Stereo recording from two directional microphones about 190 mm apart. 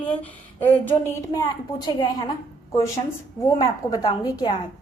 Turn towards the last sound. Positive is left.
turn(degrees=20)  # may be behind; listen again after turning